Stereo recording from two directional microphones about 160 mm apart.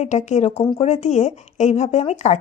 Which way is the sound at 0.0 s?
45° left (ahead or behind).